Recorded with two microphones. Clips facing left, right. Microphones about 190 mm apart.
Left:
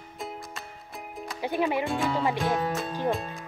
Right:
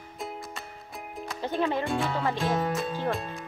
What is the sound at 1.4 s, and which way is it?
Speech, 15° left (ahead or behind).